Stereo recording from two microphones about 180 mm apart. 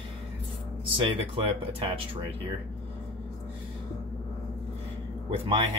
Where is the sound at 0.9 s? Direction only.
30° right (ahead or behind).